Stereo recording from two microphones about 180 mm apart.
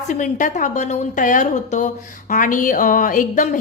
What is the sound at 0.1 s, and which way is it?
A woman's voice, 45° left (ahead or behind).